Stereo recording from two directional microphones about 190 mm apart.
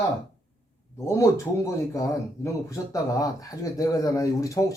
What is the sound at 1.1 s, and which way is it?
Speech, 15° left (ahead or behind).